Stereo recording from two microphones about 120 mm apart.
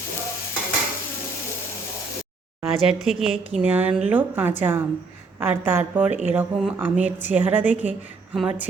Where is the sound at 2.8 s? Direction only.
Centre (ahead or behind).